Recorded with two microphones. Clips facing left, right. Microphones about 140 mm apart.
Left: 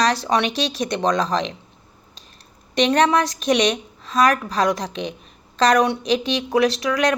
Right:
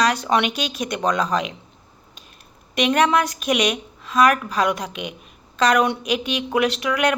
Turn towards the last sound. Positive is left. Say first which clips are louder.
# left 1 dB
turn(degrees=35)  # may be behind; listen again after turning